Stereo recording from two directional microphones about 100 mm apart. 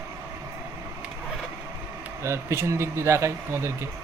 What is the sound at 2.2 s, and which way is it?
Speech, 30° right (ahead or behind).